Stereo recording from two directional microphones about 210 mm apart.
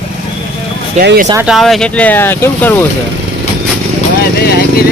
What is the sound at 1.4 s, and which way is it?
Speech, centre (ahead or behind).